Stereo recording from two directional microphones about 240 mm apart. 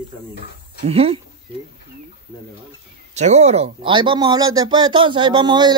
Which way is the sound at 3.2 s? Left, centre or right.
Right.